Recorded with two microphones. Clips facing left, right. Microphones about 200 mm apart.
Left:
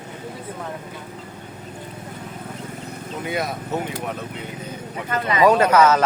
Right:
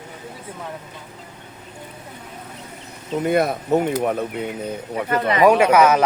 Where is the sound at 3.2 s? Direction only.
55° right (ahead or behind).